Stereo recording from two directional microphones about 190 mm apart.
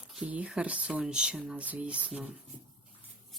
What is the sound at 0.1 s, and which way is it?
Speech, 5° right (ahead or behind).